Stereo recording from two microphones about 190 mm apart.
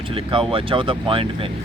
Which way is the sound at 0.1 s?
30° right (ahead or behind).